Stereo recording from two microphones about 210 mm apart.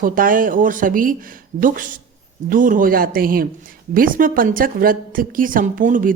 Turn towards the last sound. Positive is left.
turn(degrees=-40)  # may be behind; listen again after turning